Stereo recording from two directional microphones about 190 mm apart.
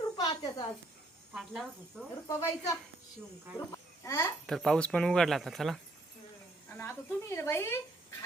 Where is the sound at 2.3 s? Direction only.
15° left (ahead or behind).